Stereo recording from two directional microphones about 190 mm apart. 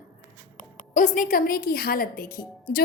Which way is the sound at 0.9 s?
45° left (ahead or behind).